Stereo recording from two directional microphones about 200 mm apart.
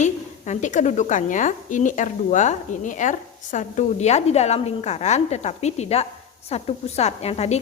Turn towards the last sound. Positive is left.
turn(degrees=30)  # may be behind; listen again after turning